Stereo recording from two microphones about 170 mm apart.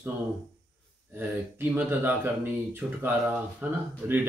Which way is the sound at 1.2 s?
15° right (ahead or behind).